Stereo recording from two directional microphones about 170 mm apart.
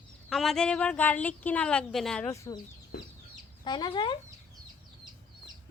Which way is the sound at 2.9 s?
60° left (ahead or behind).